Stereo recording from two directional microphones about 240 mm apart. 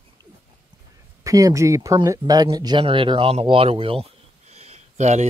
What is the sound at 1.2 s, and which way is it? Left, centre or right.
Speech, centre.